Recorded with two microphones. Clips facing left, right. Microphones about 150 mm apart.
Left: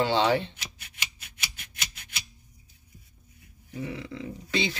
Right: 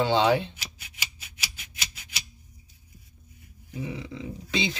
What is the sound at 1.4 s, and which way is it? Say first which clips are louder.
Scissors: even; 55° left (ahead or behind).